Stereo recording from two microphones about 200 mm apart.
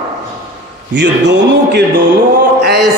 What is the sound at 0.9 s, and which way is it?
Speech, 60° right (ahead or behind).